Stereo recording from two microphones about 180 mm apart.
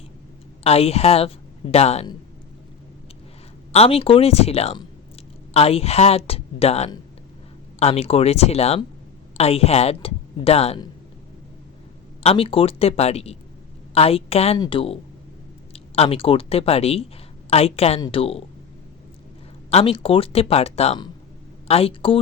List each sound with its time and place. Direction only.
0.6 s a woman's voice: 35° left (ahead or behind)
3.7 s a woman's voice: 35° left (ahead or behind)
12.2 s a woman's voice: 30° left (ahead or behind)
19.7 s a woman's voice: 30° left (ahead or behind)